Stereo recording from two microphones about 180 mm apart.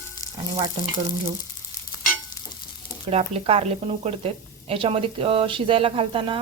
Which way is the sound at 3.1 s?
35° right (ahead or behind).